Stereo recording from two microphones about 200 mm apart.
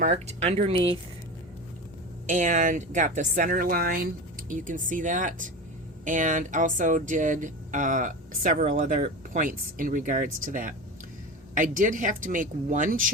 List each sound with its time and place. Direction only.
0.0 s speech: 30° right (ahead or behind)
2.2 s speech: 40° right (ahead or behind)